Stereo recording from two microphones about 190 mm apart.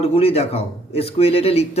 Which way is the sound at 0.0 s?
30° left (ahead or behind).